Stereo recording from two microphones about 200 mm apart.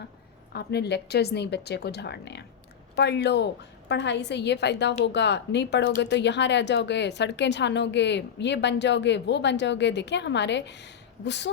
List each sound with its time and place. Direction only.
0.5 s speech: 55° left (ahead or behind)